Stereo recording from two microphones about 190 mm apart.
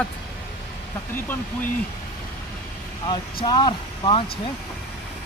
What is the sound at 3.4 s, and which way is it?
Speech, 20° left (ahead or behind).